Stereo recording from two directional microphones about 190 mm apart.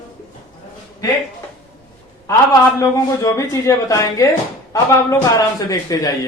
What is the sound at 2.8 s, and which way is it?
A man's voice, 15° left (ahead or behind).